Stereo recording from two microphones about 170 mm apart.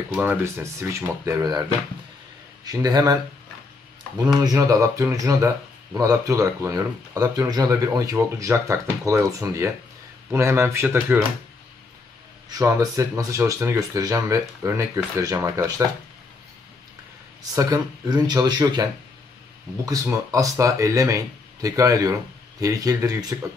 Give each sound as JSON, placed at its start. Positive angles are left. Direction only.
{"t": 0.1, "sound": "speech", "side_deg": -10}
{"t": 4.6, "sound": "speech", "side_deg": -20}
{"t": 12.4, "sound": "speech", "side_deg": -20}
{"t": 17.6, "sound": "speech", "side_deg": -25}